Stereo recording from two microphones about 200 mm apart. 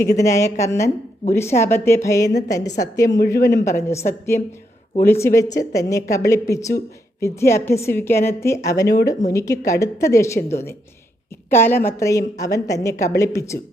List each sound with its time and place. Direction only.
0.0 s a woman's voice: 15° left (ahead or behind)
5.2 s a woman's voice: 15° left (ahead or behind)